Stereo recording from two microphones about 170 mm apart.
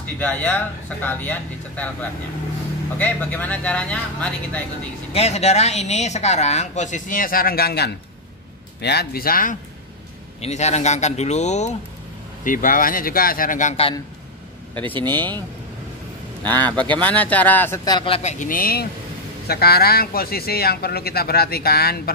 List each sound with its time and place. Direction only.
0.2 s speech: 10° left (ahead or behind)
5.1 s speech: 40° left (ahead or behind); by 9.6 s 55° left (ahead or behind)
10.4 s speech: 40° left (ahead or behind)
12.4 s speech: 55° left (ahead or behind)
15.0 s speech: 10° left (ahead or behind)
16.4 s speech: 10° left (ahead or behind)
17.8 s speech: 30° left (ahead or behind)
18.4 s speech: 55° left (ahead or behind)